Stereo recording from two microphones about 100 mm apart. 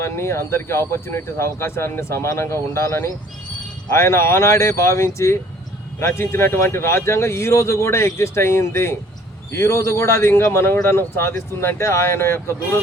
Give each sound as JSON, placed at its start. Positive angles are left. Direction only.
{"t": 0.0, "sound": "speech", "side_deg": 25}